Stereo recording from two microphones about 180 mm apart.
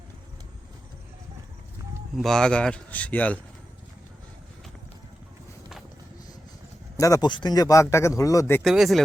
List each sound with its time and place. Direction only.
2.1 s speech: centre (ahead or behind)
7.0 s speech: 20° left (ahead or behind)
8.6 s speech: centre (ahead or behind)